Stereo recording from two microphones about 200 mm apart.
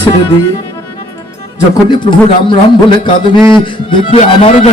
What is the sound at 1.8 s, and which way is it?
Speech, 25° left (ahead or behind).